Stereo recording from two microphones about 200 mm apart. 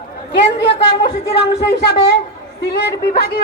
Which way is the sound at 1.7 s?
55° left (ahead or behind).